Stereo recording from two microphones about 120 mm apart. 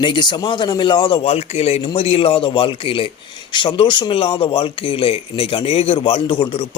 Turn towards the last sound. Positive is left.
turn(degrees=50)  # may be behind; listen again after turning